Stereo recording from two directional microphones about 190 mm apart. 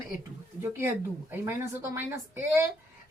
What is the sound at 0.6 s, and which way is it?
A woman's voice, 10° right (ahead or behind).